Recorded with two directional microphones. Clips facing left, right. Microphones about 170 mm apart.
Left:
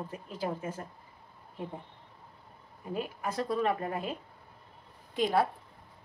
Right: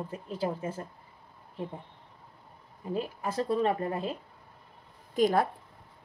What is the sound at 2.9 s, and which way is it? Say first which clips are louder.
A woman's voice: right 2 dB; 30° right (ahead or behind).